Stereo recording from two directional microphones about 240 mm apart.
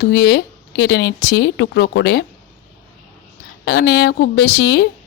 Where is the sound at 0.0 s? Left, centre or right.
Left.